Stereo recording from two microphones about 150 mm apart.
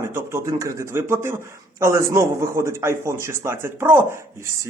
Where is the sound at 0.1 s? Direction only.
20° right (ahead or behind).